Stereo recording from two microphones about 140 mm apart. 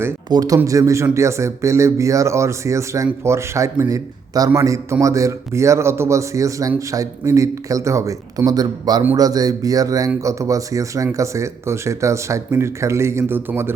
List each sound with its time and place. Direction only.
0.3 s speech: 25° right (ahead or behind)